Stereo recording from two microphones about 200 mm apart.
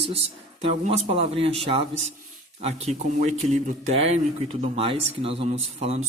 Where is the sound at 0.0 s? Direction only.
30° right (ahead or behind).